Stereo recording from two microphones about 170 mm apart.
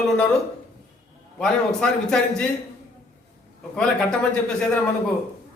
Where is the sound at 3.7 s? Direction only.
5° left (ahead or behind).